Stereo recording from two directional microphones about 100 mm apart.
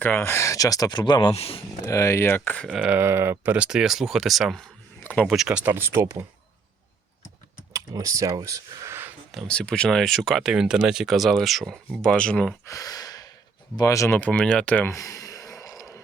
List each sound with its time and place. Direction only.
0.0 s speech: 20° left (ahead or behind); by 1.3 s 50° left (ahead or behind)
1.3 s speech: 80° left
1.8 s speech: 30° left (ahead or behind); by 2.7 s 15° left (ahead or behind)
2.7 s speech: 10° right (ahead or behind)
3.0 s speech: 25° right (ahead or behind)
5.7 s speech: 25° right (ahead or behind)
7.7 s speech: 35° right (ahead or behind)
9.3 s speech: 5° left (ahead or behind)
12.6 s speech: 35° left (ahead or behind)
14.2 s speech: 15° left (ahead or behind)
14.8 s a sound: 30° left (ahead or behind)